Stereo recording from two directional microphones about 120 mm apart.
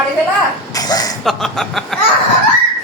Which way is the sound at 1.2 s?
Centre (ahead or behind).